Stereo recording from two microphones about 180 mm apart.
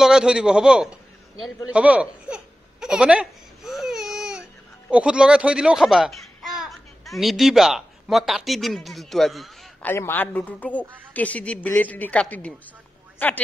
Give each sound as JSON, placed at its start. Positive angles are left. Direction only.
{"t": 0.0, "sound": "a man's voice", "side_deg": -5}
{"t": 9.8, "sound": "a woman's voice", "side_deg": 10}